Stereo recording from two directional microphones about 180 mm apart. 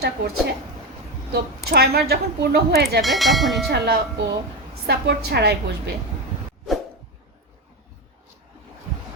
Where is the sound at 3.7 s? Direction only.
65° right (ahead or behind).